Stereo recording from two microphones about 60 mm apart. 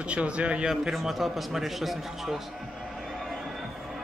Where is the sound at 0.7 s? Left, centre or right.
Centre.